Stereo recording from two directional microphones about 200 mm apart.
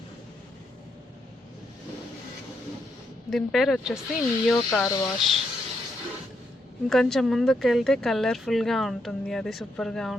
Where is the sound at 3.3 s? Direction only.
Centre (ahead or behind).